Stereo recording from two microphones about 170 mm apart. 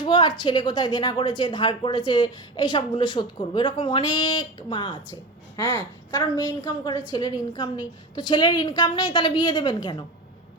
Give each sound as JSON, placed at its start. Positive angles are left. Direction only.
{"t": 0.0, "sound": "a woman's voice", "side_deg": 30}